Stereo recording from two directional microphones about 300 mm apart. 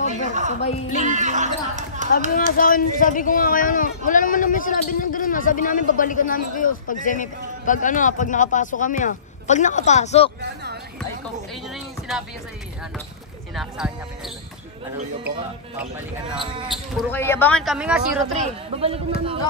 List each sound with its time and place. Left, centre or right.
0.1 s a sound: right
1.0 s speech: right
2.5 s a man's voice: left
12.1 s speech: centre
13.6 s speech: centre
16.3 s speech: centre
16.6 s speech: centre
18.4 s speech: centre